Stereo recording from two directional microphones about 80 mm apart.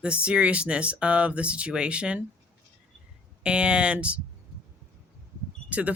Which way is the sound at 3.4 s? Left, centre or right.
Centre.